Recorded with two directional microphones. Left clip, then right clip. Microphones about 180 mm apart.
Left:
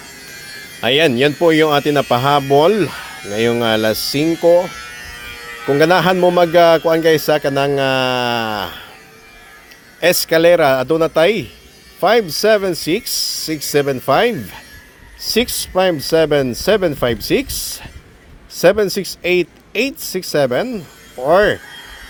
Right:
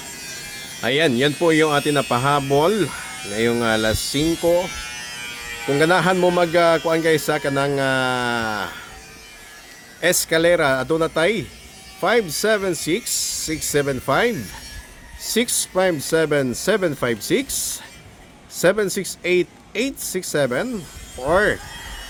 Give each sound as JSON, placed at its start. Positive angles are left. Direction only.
{"t": 0.8, "sound": "a man's voice", "side_deg": 25}
{"t": 4.7, "sound": "electric shaver", "side_deg": -30}
{"t": 5.7, "sound": "a man's voice", "side_deg": 25}
{"t": 10.0, "sound": "a man's voice", "side_deg": 25}